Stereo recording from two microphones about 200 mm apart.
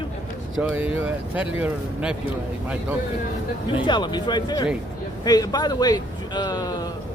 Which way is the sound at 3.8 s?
20° left (ahead or behind).